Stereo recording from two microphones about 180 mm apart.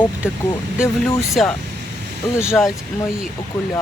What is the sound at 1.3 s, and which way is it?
Speech, centre (ahead or behind).